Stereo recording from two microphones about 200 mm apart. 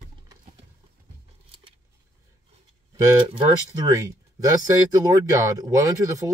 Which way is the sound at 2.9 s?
25° right (ahead or behind).